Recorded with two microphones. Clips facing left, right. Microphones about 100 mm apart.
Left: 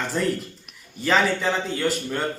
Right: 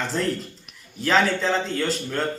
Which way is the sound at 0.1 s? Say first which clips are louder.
Left 1 dB; 5° left (ahead or behind).